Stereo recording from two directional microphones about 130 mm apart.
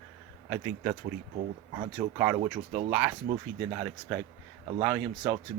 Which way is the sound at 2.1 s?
15° right (ahead or behind).